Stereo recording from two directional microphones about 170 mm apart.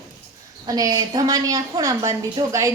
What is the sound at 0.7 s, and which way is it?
A woman's voice, 20° right (ahead or behind).